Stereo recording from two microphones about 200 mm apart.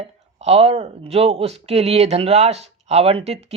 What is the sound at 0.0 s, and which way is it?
Speech, 30° right (ahead or behind).